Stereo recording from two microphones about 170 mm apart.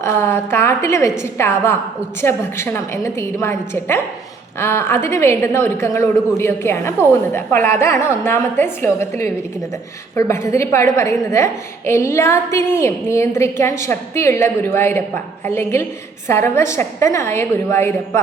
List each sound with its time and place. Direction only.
0.0 s a woman's voice: 15° left (ahead or behind)